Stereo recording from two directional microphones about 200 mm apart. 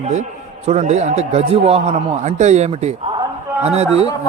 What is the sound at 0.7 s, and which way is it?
A man's voice, 35° right (ahead or behind).